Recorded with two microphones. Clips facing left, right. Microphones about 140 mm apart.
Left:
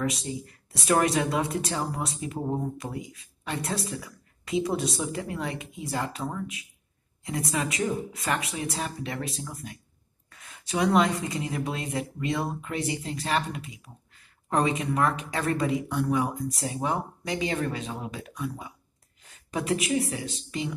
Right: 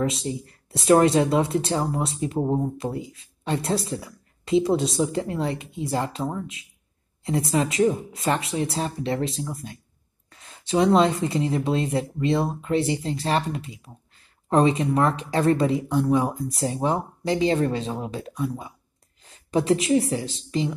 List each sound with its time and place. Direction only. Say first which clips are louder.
0.0 s a woman's voice: right 4 dB; 25° right (ahead or behind)